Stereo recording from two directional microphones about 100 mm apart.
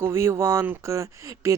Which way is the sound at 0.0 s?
25° right (ahead or behind).